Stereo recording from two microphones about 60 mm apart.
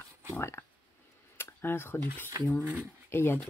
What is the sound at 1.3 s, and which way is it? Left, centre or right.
Speech, left.